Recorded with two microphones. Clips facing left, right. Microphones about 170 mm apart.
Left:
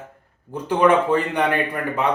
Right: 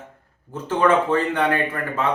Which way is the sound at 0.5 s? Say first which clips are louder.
Left 2 dB; 15° left (ahead or behind).